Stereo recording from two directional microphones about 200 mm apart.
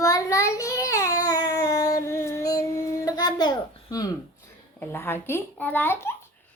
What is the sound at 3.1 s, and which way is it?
A child's voice, 20° left (ahead or behind).